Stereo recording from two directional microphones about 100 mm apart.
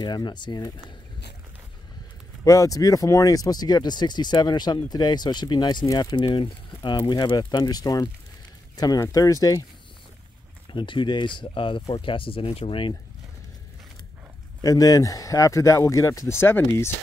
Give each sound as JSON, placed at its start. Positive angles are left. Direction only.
{"t": 0.0, "sound": "speech", "side_deg": 45}
{"t": 2.4, "sound": "speech", "side_deg": 35}
{"t": 10.7, "sound": "speech", "side_deg": 55}
{"t": 14.6, "sound": "speech", "side_deg": 35}